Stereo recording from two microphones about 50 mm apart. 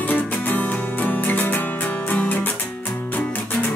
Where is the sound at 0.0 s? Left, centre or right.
Left.